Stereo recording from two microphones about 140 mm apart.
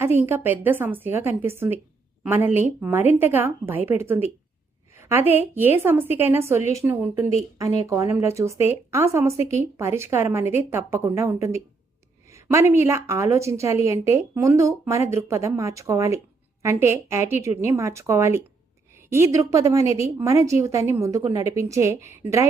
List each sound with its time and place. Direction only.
0.0 s speech: 15° right (ahead or behind)